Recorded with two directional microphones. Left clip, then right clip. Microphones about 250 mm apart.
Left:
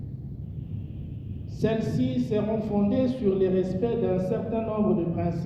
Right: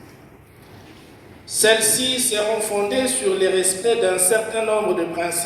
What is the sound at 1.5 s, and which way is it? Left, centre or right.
Speech, right.